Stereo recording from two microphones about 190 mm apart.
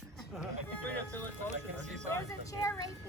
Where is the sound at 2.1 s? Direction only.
15° left (ahead or behind).